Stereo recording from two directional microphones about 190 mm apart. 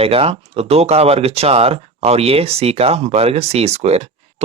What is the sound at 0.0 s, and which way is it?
Speech, 30° right (ahead or behind).